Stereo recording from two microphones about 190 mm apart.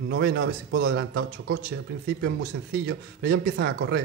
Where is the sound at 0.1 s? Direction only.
60° right (ahead or behind).